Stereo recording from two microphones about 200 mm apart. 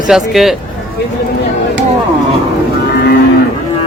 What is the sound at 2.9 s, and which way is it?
Moo, 50° left (ahead or behind).